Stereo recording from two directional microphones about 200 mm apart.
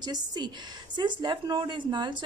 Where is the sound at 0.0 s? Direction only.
20° right (ahead or behind).